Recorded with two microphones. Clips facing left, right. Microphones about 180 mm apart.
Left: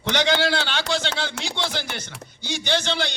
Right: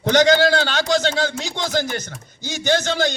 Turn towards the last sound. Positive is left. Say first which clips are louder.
# right 5 dB
turn(degrees=-45)  # may be behind; listen again after turning